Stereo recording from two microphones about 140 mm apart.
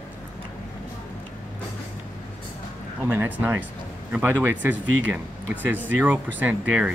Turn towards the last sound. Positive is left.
turn(degrees=-10)  # may be behind; listen again after turning